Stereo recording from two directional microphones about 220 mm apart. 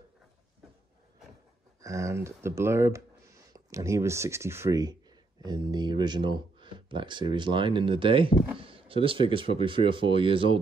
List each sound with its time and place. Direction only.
1.8 s speech: 15° right (ahead or behind)